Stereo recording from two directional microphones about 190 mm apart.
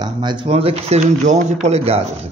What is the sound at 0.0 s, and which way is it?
A man's voice, 25° right (ahead or behind).